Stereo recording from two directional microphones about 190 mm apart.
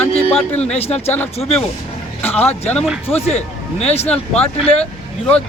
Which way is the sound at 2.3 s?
30° left (ahead or behind).